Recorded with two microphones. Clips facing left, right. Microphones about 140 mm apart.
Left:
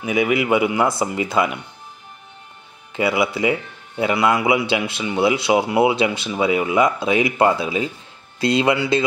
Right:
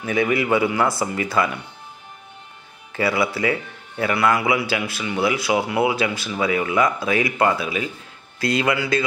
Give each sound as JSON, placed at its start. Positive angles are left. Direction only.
{"t": 0.0, "sound": "a man's voice", "side_deg": 15}
{"t": 2.9, "sound": "a man's voice", "side_deg": 20}